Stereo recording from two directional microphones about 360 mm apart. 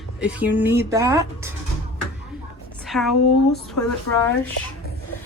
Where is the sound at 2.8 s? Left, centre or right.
Centre.